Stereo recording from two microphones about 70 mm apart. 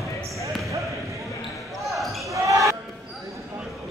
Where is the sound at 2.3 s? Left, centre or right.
Right.